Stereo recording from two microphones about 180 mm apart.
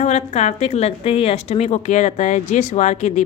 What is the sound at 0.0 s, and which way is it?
A woman's voice, 40° left (ahead or behind).